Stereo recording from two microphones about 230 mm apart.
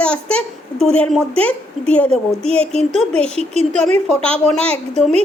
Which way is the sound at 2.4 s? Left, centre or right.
Right.